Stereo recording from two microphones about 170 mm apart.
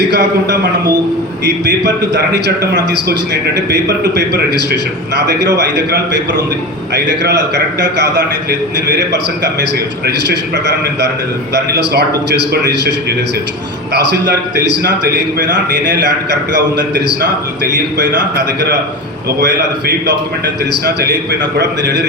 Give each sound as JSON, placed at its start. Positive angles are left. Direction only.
{"t": 0.1, "sound": "a man's voice", "side_deg": -80}
{"t": 20.8, "sound": "a man's voice", "side_deg": -70}